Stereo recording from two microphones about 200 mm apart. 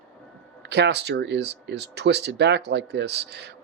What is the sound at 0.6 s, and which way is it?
Speech, 55° right (ahead or behind).